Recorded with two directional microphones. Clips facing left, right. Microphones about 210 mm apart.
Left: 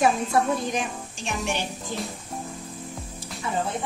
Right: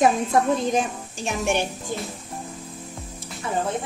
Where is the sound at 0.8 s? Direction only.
45° right (ahead or behind).